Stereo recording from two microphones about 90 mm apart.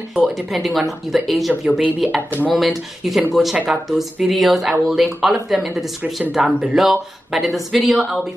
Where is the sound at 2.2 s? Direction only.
20° right (ahead or behind).